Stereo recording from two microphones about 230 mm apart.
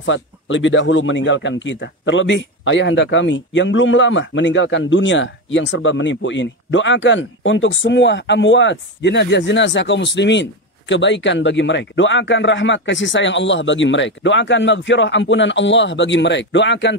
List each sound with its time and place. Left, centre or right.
0.0 s speech: left